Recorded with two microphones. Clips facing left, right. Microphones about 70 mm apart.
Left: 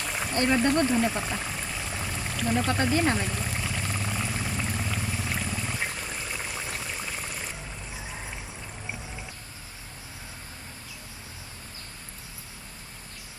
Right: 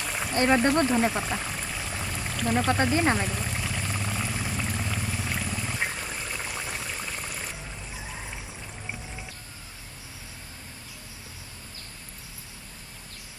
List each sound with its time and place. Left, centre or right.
0.0 s a sound: centre
0.3 s speech: right
1.1 s pour: centre
2.8 s speech: centre
3.2 s pour: centre